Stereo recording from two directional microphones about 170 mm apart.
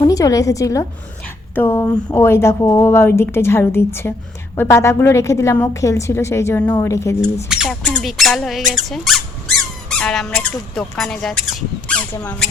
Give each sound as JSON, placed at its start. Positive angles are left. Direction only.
{"t": 0.0, "sound": "a woman's voice", "side_deg": 20}
{"t": 7.4, "sound": "speech", "side_deg": -5}
{"t": 12.1, "sound": "a woman's voice", "side_deg": 15}